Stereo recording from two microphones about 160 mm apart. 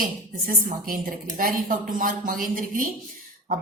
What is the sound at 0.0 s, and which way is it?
Speech, 60° right (ahead or behind).